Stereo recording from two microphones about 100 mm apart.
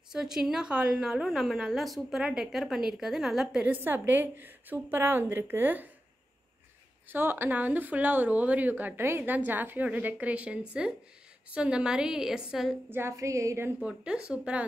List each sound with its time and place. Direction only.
0.1 s a woman's voice: 5° right (ahead or behind)
3.7 s a woman's voice: 20° right (ahead or behind)
7.1 s a woman's voice: 20° right (ahead or behind)
12.9 s a woman's voice: 25° right (ahead or behind)
13.7 s a woman's voice: 10° right (ahead or behind)